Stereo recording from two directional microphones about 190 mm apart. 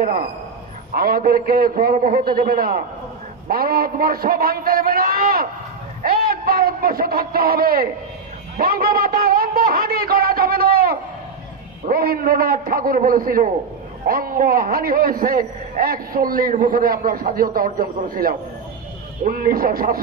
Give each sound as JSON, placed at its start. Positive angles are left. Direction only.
{"t": 0.0, "sound": "a man's voice", "side_deg": -50}